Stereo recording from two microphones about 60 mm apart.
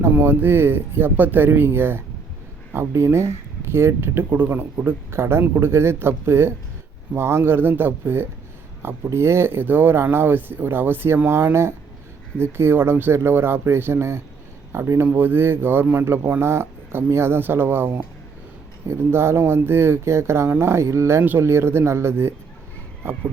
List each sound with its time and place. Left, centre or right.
0.2 s speech: right
5.1 s speech: right
12.4 s speech: right
15.0 s speech: right
21.2 s speech: right
21.4 s speech: right